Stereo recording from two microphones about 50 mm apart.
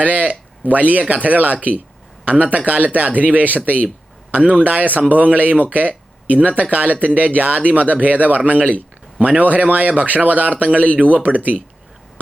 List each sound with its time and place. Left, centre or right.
0.0 s a man's voice: right
9.4 s speech: right